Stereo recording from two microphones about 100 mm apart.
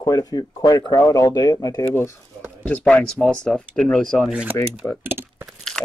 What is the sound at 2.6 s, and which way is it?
Speech, 10° left (ahead or behind).